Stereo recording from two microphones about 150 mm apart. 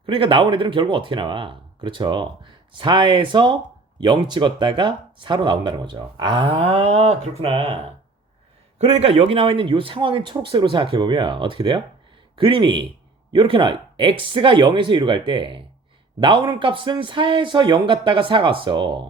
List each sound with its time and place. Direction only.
0.0 s speech: 35° right (ahead or behind)
8.8 s speech: 45° right (ahead or behind)